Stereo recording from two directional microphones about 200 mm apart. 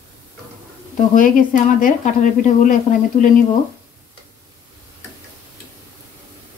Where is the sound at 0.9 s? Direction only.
40° left (ahead or behind).